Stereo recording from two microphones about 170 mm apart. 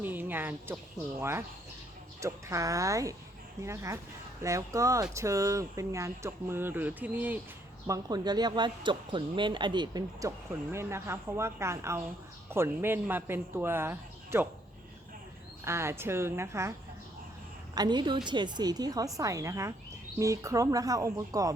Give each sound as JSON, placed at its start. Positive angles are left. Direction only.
{"t": 0.0, "sound": "speech", "side_deg": -10}
{"t": 7.9, "sound": "speech", "side_deg": -20}
{"t": 15.6, "sound": "speech", "side_deg": -15}
{"t": 17.7, "sound": "speech", "side_deg": -25}